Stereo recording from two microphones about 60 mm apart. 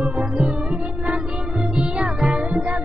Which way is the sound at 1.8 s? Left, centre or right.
Centre.